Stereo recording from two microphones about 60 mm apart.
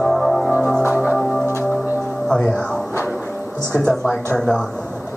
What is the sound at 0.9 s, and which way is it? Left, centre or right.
Music, right.